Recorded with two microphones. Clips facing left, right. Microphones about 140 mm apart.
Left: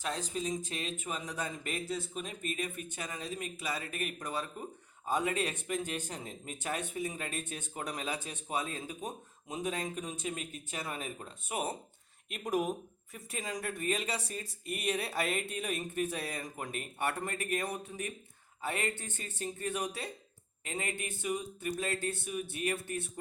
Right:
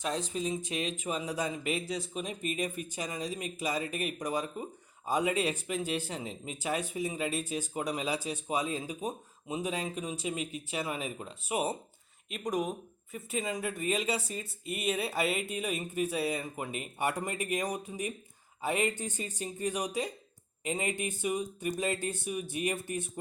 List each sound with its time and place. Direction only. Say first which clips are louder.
0.7 s speech: right 5 dB; 15° right (ahead or behind)
12.3 s speech: even; 5° left (ahead or behind); by 23.2 s 20° right (ahead or behind)